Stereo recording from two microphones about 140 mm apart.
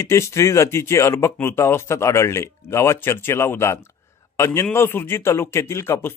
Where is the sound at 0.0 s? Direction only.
20° left (ahead or behind).